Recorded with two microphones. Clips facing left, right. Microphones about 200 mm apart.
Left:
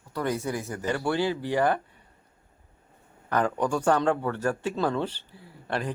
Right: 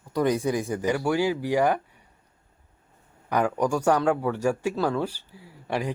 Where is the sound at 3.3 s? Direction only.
10° right (ahead or behind).